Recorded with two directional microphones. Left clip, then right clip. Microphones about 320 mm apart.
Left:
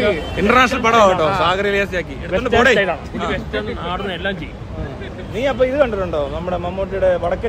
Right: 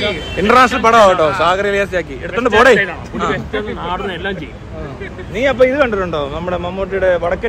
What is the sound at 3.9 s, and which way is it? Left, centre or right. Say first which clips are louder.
Speech: right 2 dB; centre.